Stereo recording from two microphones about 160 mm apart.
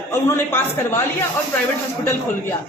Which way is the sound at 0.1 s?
15° left (ahead or behind).